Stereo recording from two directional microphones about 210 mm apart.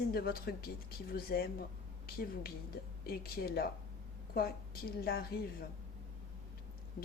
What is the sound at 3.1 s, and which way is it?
A woman's voice, 45° left (ahead or behind).